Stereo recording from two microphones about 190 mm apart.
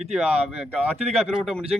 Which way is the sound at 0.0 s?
5° right (ahead or behind).